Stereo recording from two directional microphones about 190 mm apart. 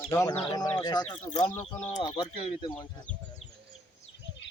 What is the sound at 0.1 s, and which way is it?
Speech, 15° left (ahead or behind).